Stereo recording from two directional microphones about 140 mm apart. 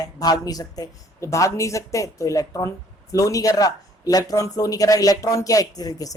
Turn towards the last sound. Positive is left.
turn(degrees=25)  # may be behind; listen again after turning